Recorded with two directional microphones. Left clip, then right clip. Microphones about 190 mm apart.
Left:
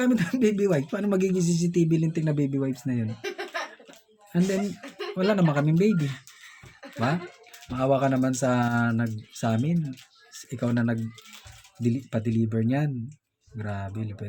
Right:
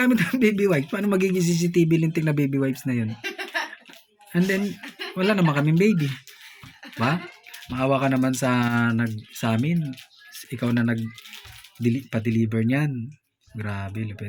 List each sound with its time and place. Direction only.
0.0 s speech: centre (ahead or behind)
3.2 s chuckle: 35° left (ahead or behind)
4.3 s speech: centre (ahead or behind)
7.7 s speech: 5° left (ahead or behind)